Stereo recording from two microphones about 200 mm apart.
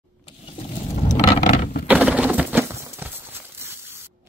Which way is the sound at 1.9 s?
5° right (ahead or behind).